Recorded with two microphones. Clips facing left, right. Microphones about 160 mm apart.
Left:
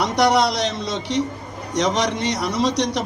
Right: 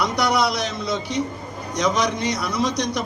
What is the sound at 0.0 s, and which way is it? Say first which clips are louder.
A man's voice: left 3 dB; 80° left.